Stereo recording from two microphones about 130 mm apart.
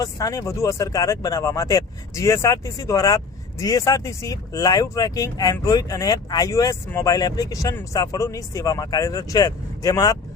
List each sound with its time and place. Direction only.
0.0 s speech: 25° left (ahead or behind)